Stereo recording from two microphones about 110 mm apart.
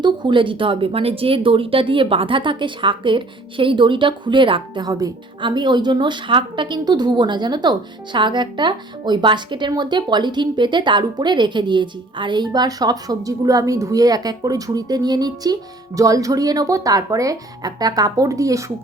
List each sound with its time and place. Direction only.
0.0 s a woman's voice: 45° right (ahead or behind); by 18.6 s 30° right (ahead or behind)